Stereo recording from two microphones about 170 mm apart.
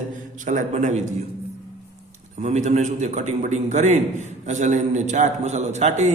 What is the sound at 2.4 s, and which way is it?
A man's voice, 40° right (ahead or behind).